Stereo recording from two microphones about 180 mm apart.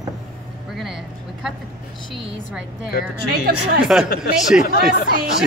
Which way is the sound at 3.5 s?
60° right (ahead or behind).